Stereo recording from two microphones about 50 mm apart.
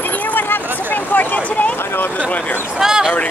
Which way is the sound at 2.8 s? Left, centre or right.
Centre.